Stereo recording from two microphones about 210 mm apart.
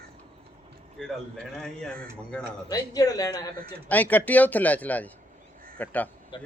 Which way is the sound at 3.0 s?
15° left (ahead or behind).